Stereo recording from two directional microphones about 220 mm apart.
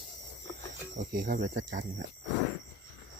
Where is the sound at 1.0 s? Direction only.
40° right (ahead or behind).